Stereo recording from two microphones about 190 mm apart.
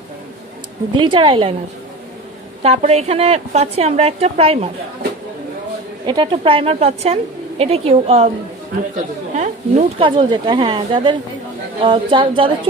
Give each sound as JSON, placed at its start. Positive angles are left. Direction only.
{"t": 0.9, "sound": "speech", "side_deg": -25}
{"t": 2.6, "sound": "a woman's voice", "side_deg": -35}
{"t": 6.0, "sound": "a woman's voice", "side_deg": -25}
{"t": 9.3, "sound": "speech", "side_deg": -35}